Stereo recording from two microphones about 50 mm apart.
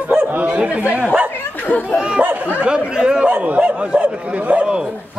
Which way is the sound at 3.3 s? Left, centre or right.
Right.